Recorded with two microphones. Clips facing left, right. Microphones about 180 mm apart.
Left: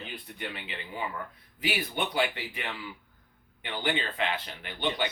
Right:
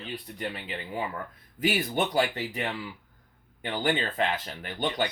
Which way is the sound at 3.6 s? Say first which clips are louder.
Right 4 dB; 45° right (ahead or behind).